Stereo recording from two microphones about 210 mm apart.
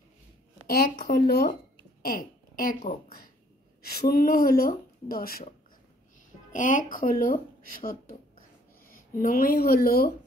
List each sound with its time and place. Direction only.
0.7 s speech: 45° left (ahead or behind)
6.5 s speech: 40° left (ahead or behind)